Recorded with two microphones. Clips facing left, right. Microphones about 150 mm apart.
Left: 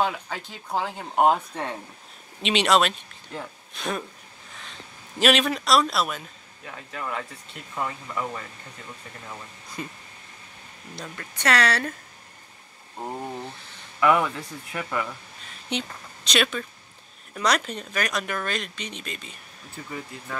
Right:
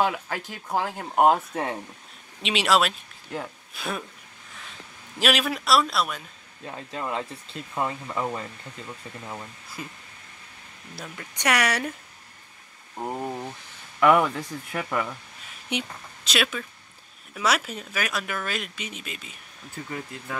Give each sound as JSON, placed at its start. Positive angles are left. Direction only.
{"t": 0.0, "sound": "speech", "side_deg": -10}
{"t": 5.2, "sound": "speech", "side_deg": -5}
{"t": 6.6, "sound": "speech", "side_deg": -25}
{"t": 9.8, "sound": "speech", "side_deg": -5}
{"t": 11.0, "sound": "speech", "side_deg": -15}
{"t": 13.0, "sound": "speech", "side_deg": -10}